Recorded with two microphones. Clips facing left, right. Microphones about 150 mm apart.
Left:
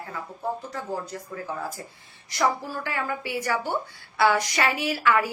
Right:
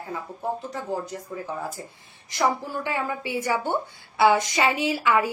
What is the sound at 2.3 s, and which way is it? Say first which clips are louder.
A woman's voice: right 1 dB; 20° right (ahead or behind).